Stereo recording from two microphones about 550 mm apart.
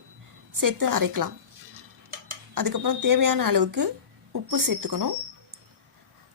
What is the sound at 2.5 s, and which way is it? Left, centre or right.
A woman's voice, right.